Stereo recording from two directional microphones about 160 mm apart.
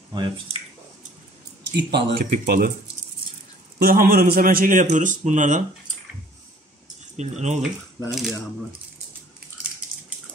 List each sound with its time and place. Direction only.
0.1 s speech: 30° right (ahead or behind)
1.6 s speech: 90° right
2.3 s a man's voice: 65° right (ahead or behind)
3.8 s a man's voice: 65° right (ahead or behind); by 5.6 s 50° right (ahead or behind)
7.2 s speech: 45° right (ahead or behind)
8.1 s speech: centre (ahead or behind)